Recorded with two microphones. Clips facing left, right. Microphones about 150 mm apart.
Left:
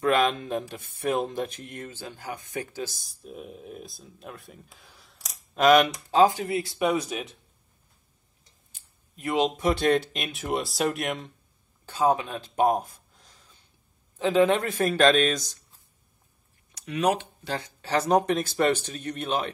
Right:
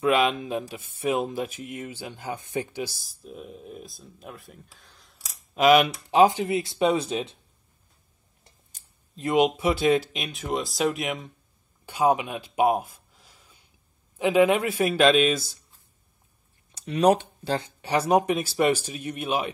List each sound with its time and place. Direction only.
0.0 s speech: 5° right (ahead or behind)
3.0 s speech: centre (ahead or behind); by 7.3 s 30° right (ahead or behind)
8.8 s a sound: 40° right (ahead or behind)
9.1 s speech: 25° right (ahead or behind)
9.4 s speech: 5° right (ahead or behind)
11.8 s a sound: 15° right (ahead or behind)
14.1 s speech: 10° right (ahead or behind)
16.7 s speech: 30° right (ahead or behind)
17.8 s speech: 10° right (ahead or behind)